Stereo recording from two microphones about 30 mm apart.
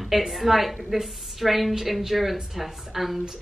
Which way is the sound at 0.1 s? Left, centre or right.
Centre.